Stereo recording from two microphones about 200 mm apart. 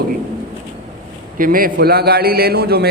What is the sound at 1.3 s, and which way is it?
A man's voice, 45° right (ahead or behind).